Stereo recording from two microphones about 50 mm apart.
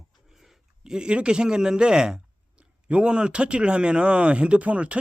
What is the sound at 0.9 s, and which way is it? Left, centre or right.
A man's voice, centre.